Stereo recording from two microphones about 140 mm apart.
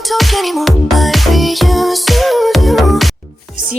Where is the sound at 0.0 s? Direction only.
Centre (ahead or behind).